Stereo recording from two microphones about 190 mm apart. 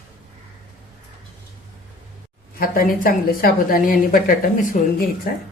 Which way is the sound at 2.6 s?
50° left (ahead or behind).